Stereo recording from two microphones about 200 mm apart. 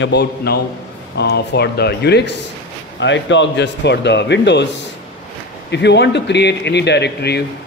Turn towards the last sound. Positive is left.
turn(degrees=55)  # may be behind; listen again after turning